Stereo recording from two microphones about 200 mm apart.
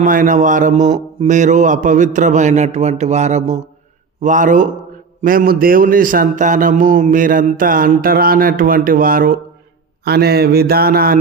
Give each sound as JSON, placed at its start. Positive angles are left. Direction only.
{"t": 0.0, "sound": "a man's voice", "side_deg": -40}